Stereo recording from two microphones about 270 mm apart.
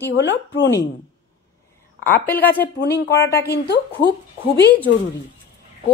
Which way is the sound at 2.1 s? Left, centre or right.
Centre.